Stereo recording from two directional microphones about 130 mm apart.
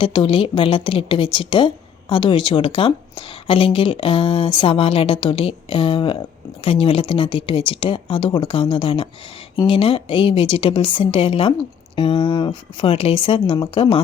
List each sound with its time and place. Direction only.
0.0 s a woman's voice: 40° left (ahead or behind)